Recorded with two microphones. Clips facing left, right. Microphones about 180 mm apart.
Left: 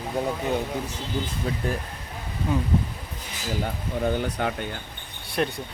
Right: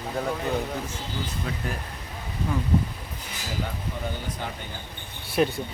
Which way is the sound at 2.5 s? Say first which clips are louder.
Left 3 dB; 20° left (ahead or behind).